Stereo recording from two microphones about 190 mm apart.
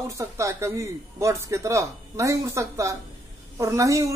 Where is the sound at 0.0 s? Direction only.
15° right (ahead or behind).